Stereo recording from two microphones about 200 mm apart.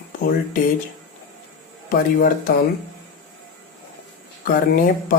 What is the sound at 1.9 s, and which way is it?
Speech, 50° left (ahead or behind).